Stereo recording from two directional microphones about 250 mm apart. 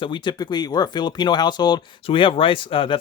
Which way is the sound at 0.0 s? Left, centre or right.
Centre.